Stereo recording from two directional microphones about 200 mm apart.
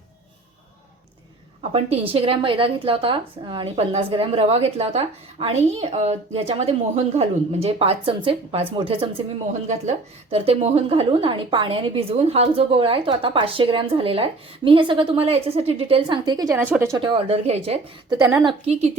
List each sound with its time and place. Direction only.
1.7 s a woman's voice: 30° right (ahead or behind)
10.3 s a woman's voice: 30° right (ahead or behind); by 17.0 s 15° right (ahead or behind)
17.0 s speech: 30° right (ahead or behind)
18.1 s a woman's voice: 20° right (ahead or behind)
18.6 s speech: 30° right (ahead or behind)